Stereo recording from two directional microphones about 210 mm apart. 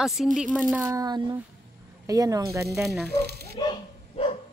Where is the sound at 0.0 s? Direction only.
Centre (ahead or behind).